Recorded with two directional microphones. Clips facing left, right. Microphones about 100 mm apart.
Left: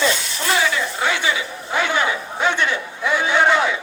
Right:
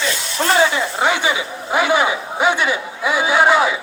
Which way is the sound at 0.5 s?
30° right (ahead or behind).